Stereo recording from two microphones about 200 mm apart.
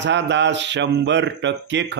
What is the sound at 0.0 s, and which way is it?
A man's voice, 60° right (ahead or behind).